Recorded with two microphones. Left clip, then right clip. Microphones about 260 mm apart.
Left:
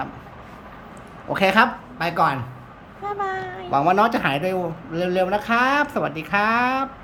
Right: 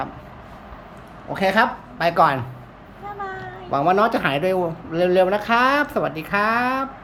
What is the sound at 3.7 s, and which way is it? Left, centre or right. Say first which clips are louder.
A man's voice: even; centre.